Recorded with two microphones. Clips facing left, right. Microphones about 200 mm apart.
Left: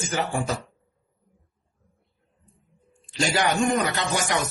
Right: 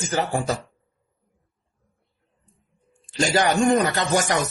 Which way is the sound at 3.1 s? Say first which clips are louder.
Right 3 dB; 40° right (ahead or behind).